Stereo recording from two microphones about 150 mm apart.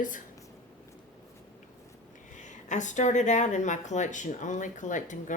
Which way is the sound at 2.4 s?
55° left (ahead or behind).